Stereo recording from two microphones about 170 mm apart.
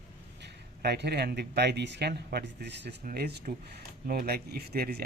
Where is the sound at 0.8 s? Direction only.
70° right (ahead or behind).